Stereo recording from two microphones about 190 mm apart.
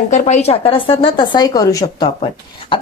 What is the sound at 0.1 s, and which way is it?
Speech, 40° left (ahead or behind).